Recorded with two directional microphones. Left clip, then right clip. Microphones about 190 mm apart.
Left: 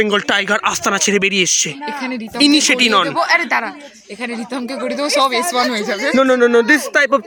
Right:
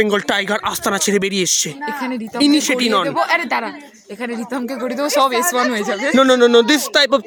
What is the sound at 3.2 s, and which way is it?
Speech, 90° right.